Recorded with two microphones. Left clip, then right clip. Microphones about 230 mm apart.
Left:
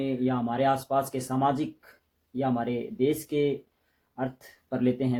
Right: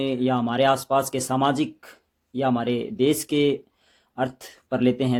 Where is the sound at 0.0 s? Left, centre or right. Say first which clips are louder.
Right 5 dB; right.